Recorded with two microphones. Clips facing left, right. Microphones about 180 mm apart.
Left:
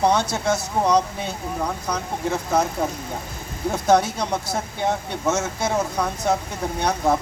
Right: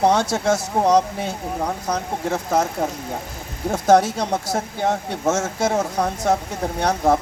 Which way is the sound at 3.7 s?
45° right (ahead or behind).